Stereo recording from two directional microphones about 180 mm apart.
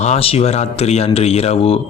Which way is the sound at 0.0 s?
35° left (ahead or behind).